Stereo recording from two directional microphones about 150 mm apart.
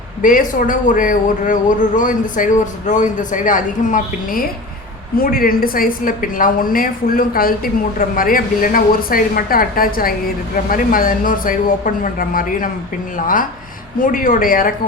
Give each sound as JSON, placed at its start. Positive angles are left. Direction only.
{"t": 0.2, "sound": "a man's voice", "side_deg": 65}
{"t": 5.1, "sound": "a woman's voice", "side_deg": 75}